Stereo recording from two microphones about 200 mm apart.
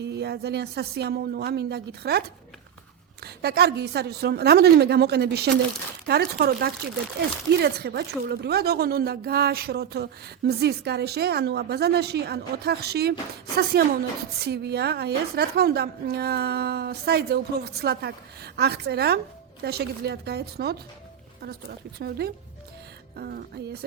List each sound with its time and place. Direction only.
0.0 s a woman's voice: 55° right (ahead or behind)
3.2 s a woman's voice: 55° right (ahead or behind)